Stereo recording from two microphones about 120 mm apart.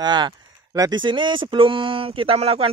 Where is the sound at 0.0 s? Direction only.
35° right (ahead or behind).